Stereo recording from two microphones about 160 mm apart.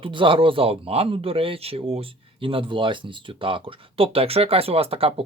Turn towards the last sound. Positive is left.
turn(degrees=-35)  # may be behind; listen again after turning